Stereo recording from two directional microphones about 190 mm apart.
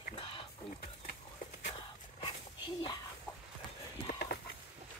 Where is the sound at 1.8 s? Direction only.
25° left (ahead or behind).